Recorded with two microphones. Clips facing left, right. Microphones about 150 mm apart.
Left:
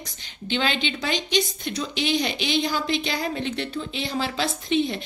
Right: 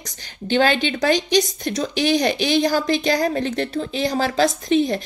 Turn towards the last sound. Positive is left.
turn(degrees=-40)  # may be behind; listen again after turning